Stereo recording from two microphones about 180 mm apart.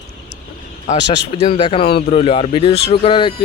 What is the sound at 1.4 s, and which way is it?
Speech, 30° left (ahead or behind).